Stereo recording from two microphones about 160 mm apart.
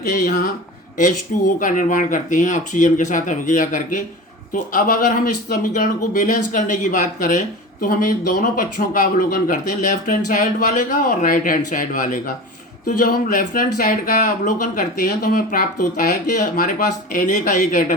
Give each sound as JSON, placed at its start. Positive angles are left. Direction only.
{"t": 0.3, "sound": "speech", "side_deg": 50}
{"t": 1.5, "sound": "speech", "side_deg": 55}